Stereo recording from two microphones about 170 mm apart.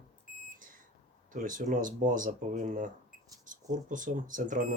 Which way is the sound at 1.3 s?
50° right (ahead or behind).